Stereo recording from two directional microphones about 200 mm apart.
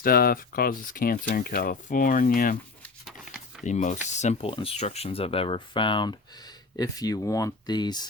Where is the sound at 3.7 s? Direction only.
40° left (ahead or behind).